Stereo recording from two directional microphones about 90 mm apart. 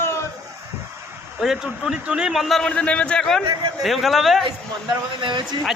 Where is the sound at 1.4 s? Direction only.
5° right (ahead or behind).